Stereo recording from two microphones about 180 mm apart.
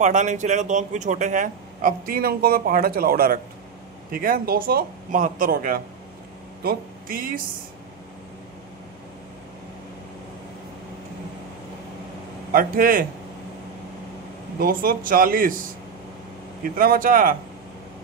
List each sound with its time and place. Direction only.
0.0 s speech: 45° right (ahead or behind)
12.5 s speech: 50° right (ahead or behind)
14.6 s speech: 55° right (ahead or behind)
16.6 s speech: 50° right (ahead or behind)